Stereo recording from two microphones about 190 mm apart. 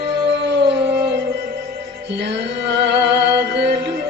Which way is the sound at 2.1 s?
65° right (ahead or behind).